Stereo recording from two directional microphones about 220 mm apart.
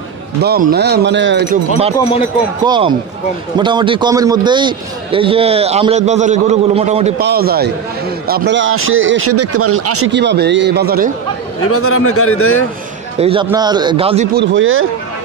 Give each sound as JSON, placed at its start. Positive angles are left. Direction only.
{"t": 0.4, "sound": "speech", "side_deg": -45}
{"t": 2.0, "sound": "speech", "side_deg": 25}
{"t": 2.6, "sound": "a man's voice", "side_deg": -20}
{"t": 7.2, "sound": "speech", "side_deg": -45}
{"t": 10.1, "sound": "speech", "side_deg": -50}
{"t": 11.7, "sound": "a man's voice", "side_deg": 75}
{"t": 13.2, "sound": "a man's voice", "side_deg": -25}
{"t": 14.3, "sound": "speech", "side_deg": -55}